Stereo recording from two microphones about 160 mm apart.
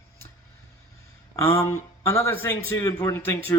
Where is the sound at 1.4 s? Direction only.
15° left (ahead or behind).